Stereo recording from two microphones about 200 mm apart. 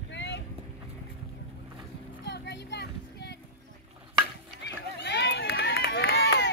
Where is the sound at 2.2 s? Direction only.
60° left (ahead or behind).